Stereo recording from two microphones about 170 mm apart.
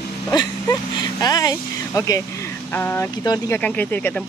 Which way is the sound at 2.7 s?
10° left (ahead or behind).